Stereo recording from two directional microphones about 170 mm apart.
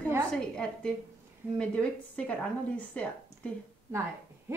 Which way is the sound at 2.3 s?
5° left (ahead or behind).